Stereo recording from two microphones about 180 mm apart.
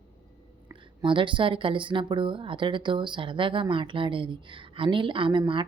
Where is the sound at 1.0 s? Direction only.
25° right (ahead or behind).